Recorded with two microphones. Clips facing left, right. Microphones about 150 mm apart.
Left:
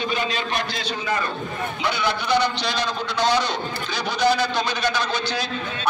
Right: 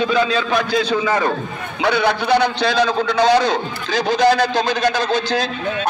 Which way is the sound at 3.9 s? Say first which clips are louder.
Right 6 dB; 90° right.